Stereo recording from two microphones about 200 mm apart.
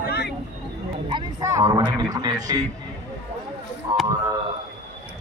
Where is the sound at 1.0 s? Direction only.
20° right (ahead or behind).